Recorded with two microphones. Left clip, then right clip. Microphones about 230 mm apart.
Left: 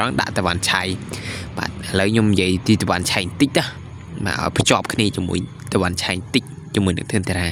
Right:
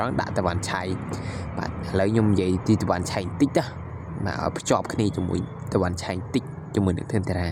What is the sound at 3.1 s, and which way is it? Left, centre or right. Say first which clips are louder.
Speech: left 5 dB; left.